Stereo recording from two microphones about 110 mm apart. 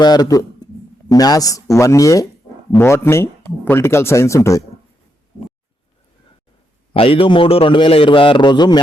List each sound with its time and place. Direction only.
0.0 s speech: 40° left (ahead or behind)
6.9 s a man's voice: 55° left (ahead or behind)